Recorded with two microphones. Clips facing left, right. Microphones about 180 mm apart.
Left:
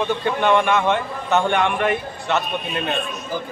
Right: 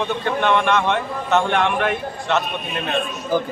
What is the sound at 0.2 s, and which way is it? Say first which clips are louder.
A man's voice: even; 5° left (ahead or behind).